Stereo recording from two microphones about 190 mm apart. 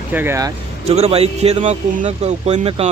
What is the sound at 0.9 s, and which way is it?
Speech, 35° right (ahead or behind).